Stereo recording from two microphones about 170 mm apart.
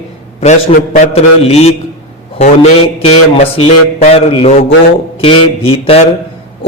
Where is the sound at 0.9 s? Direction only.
35° left (ahead or behind).